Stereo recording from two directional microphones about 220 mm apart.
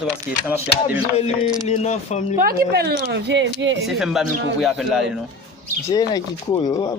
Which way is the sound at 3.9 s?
Centre (ahead or behind).